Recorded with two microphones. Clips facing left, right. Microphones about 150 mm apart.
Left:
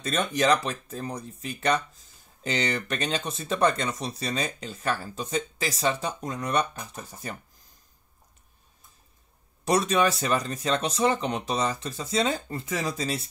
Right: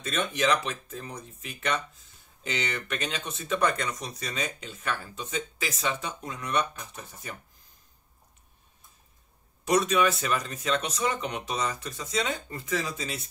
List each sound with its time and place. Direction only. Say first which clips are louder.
0.0 s speech: left 3 dB; 40° left (ahead or behind)
9.7 s speech: left 1 dB; 35° left (ahead or behind)